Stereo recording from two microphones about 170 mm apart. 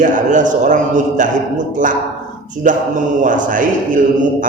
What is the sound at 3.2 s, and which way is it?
Speech, 50° right (ahead or behind).